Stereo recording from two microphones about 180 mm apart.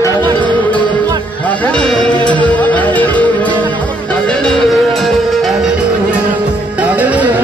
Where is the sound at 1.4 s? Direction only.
5° left (ahead or behind).